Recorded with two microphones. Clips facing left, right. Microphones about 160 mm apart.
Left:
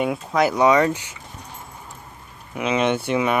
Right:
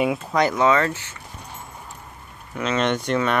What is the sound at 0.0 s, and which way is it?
Speech, centre (ahead or behind).